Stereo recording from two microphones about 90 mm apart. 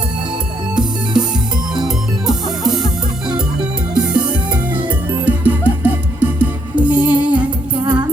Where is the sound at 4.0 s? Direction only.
10° right (ahead or behind).